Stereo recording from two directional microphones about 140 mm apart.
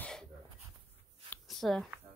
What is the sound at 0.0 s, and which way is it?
Dog, 5° left (ahead or behind).